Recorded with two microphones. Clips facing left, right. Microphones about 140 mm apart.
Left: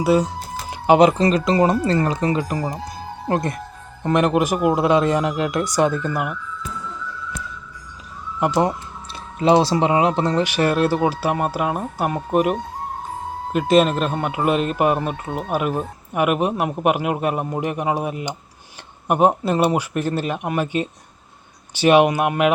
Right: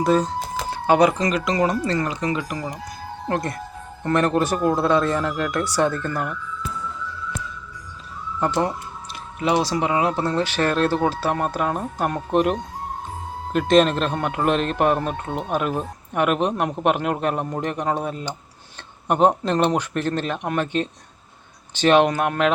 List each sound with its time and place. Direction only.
0.0 s a man's voice: 10° left (ahead or behind)
0.7 s a man's voice: 20° left (ahead or behind)
8.4 s a man's voice: 15° left (ahead or behind)
9.4 s a man's voice: 30° left (ahead or behind); by 22.5 s 10° left (ahead or behind)